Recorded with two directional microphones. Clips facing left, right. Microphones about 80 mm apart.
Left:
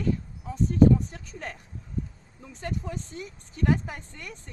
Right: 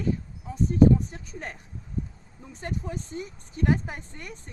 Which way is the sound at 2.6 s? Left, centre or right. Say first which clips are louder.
Even; right.